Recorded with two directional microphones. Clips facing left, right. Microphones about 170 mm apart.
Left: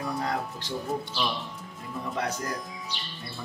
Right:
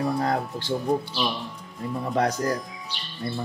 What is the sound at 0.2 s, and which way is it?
Speech, 40° right (ahead or behind).